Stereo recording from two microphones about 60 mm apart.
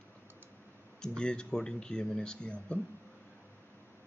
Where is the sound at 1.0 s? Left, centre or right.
Centre.